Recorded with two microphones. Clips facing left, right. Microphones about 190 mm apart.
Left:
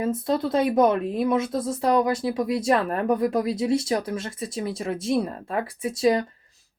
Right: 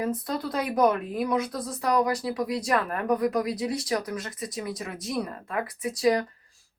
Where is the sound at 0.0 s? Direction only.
25° left (ahead or behind).